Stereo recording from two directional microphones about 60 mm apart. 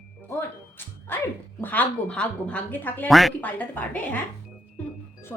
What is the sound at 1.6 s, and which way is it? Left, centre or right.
Speech, left.